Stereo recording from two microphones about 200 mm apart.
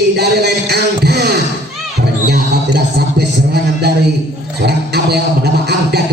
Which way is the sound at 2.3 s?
55° right (ahead or behind).